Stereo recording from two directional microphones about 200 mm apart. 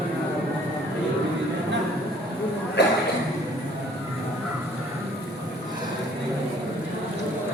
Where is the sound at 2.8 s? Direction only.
60° left (ahead or behind).